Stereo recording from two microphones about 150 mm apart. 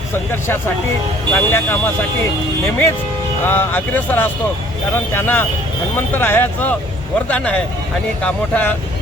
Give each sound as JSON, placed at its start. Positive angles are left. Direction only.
{"t": 0.3, "sound": "speech", "side_deg": 15}
{"t": 3.4, "sound": "speech", "side_deg": 15}